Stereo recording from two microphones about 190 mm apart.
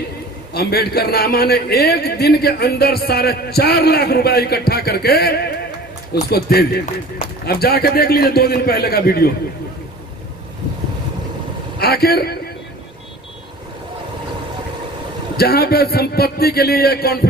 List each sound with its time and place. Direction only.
0.5 s a man's voice: 55° left (ahead or behind)
11.8 s a man's voice: 55° left (ahead or behind)
15.3 s a man's voice: 55° left (ahead or behind)